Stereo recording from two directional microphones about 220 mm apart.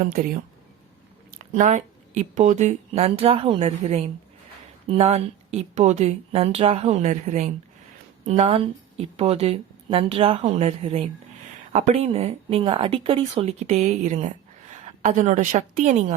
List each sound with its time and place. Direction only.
1.5 s speech: 35° right (ahead or behind)